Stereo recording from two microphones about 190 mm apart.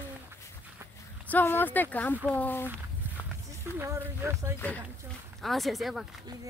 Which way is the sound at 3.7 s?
15° right (ahead or behind).